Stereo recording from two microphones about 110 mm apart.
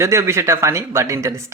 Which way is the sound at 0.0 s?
25° right (ahead or behind).